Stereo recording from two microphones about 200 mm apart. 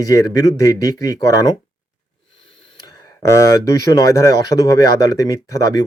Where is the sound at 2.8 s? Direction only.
20° left (ahead or behind).